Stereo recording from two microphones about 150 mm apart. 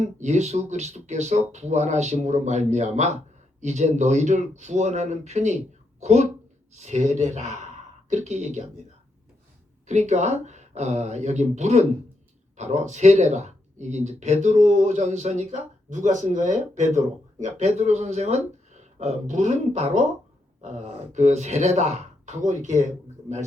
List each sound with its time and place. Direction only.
0.0 s speech: 50° right (ahead or behind)
9.8 s speech: 50° right (ahead or behind)